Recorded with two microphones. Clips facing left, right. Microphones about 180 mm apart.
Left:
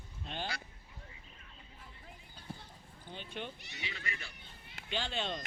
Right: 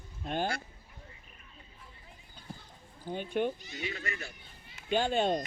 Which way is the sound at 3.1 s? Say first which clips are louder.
Right 12 dB; 50° right (ahead or behind).